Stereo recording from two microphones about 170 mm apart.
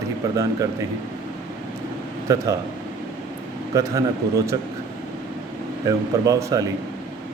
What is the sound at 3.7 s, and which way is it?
Speech, 20° right (ahead or behind).